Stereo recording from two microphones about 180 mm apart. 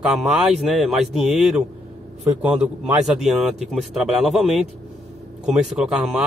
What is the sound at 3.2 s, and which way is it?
Speech, centre (ahead or behind).